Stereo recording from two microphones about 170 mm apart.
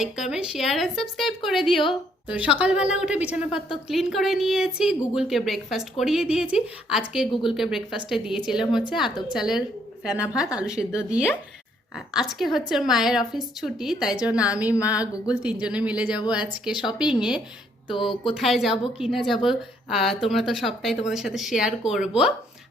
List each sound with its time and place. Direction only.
0.0 s a woman's voice: 5° right (ahead or behind)
17.8 s speech: 30° left (ahead or behind)
18.3 s a woman's voice: centre (ahead or behind)